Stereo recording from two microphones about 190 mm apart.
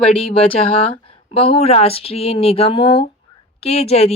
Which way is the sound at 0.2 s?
30° left (ahead or behind).